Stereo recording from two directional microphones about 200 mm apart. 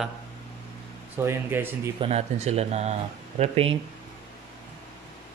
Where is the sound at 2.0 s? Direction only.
30° right (ahead or behind).